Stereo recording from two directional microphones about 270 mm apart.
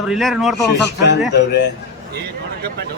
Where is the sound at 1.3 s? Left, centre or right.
Left.